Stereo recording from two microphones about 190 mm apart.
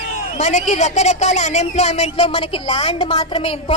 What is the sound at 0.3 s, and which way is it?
Speech, 40° left (ahead or behind).